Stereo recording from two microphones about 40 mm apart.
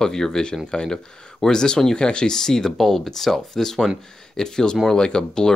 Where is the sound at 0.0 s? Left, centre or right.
Centre.